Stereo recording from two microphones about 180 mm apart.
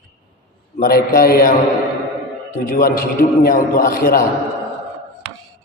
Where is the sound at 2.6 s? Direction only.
50° left (ahead or behind).